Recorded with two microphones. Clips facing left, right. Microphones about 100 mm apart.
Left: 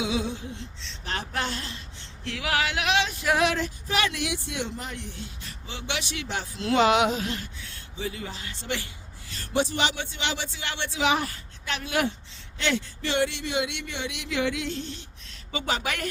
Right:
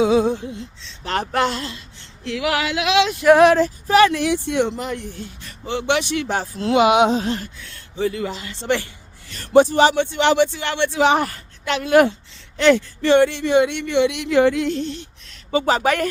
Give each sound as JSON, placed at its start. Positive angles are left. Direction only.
{"t": 0.0, "sound": "speech", "side_deg": -45}
{"t": 1.0, "sound": "speech", "side_deg": -70}
{"t": 3.2, "sound": "speech", "side_deg": -50}
{"t": 4.9, "sound": "speech", "side_deg": -50}
{"t": 6.7, "sound": "a sound", "side_deg": -15}
{"t": 7.1, "sound": "speech", "side_deg": -30}
{"t": 7.9, "sound": "speech", "side_deg": -60}
{"t": 9.3, "sound": "a man's voice", "side_deg": -60}
{"t": 9.9, "sound": "a woman's voice", "side_deg": -65}
{"t": 11.9, "sound": "speech", "side_deg": -50}
{"t": 15.5, "sound": "speech", "side_deg": -40}